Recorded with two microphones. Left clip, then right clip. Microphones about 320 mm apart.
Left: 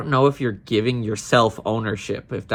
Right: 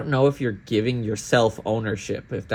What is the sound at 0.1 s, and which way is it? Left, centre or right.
Speech, centre.